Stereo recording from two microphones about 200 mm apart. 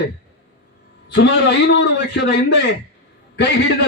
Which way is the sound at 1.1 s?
60° left (ahead or behind).